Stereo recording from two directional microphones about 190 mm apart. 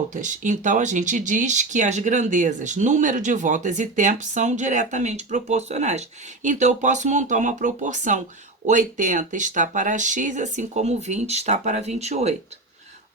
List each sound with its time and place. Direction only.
0.1 s speech: 40° right (ahead or behind)